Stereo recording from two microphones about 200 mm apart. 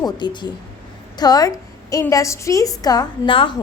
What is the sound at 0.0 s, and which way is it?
A woman's voice, 20° left (ahead or behind).